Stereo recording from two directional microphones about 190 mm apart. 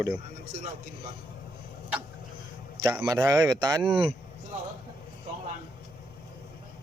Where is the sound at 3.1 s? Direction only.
15° right (ahead or behind).